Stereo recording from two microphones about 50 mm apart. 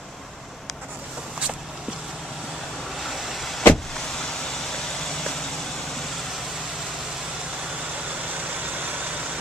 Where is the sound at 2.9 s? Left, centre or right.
Centre.